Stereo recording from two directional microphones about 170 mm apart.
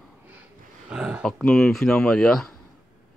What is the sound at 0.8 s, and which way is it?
A man's voice, 5° right (ahead or behind).